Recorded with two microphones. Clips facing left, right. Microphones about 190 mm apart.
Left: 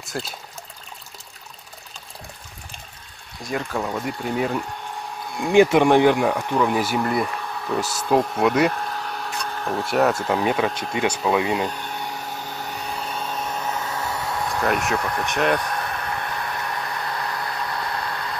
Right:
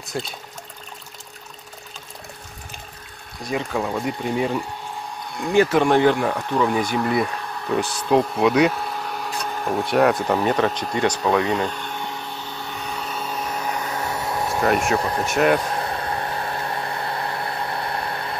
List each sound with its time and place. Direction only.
0.1 s speech: centre (ahead or behind)
3.4 s speech: centre (ahead or behind)
5.4 s speech: 15° left (ahead or behind)
8.4 s a sound: centre (ahead or behind)
9.8 s speech: centre (ahead or behind)
12.8 s a sound: centre (ahead or behind); by 14.6 s 25° right (ahead or behind)
15.0 s speech: 25° right (ahead or behind)
15.3 s speech: 5° right (ahead or behind)
15.6 s a sound: 30° right (ahead or behind)